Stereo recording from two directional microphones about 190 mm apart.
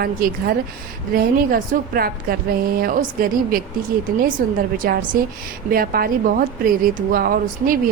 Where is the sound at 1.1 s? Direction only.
50° right (ahead or behind).